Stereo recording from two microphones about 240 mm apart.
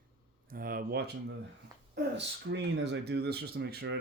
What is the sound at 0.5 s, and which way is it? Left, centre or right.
Speech, right.